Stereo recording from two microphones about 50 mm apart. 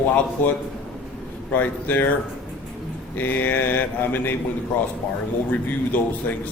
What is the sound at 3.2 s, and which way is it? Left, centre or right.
A man's voice, left.